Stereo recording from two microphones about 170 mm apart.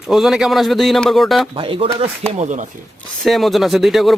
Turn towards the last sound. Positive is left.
turn(degrees=0)  # may be behind; listen again after turning